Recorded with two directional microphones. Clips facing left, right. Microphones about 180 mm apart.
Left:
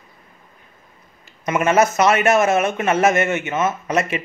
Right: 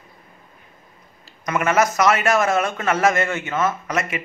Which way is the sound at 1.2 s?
25° left (ahead or behind).